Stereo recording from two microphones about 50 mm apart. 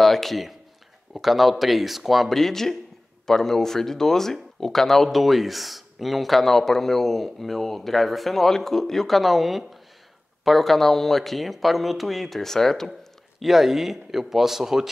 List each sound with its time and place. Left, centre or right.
0.0 s speech: centre
13.4 s speech: centre